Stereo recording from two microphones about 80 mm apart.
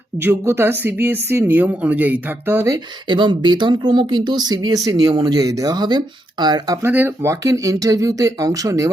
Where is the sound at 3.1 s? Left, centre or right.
Right.